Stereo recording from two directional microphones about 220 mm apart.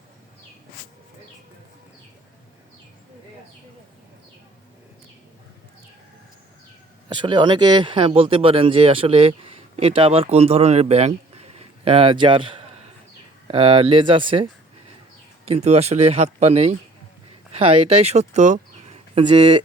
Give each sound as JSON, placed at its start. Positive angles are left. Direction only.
{"t": 7.1, "sound": "speech", "side_deg": -20}
{"t": 15.4, "sound": "speech", "side_deg": -30}